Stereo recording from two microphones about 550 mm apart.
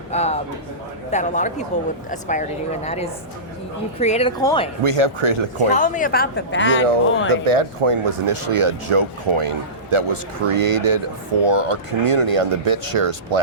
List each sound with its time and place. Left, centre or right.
0.1 s a man's voice: centre
4.8 s speech: right
5.6 s speech: centre
7.4 s speech: right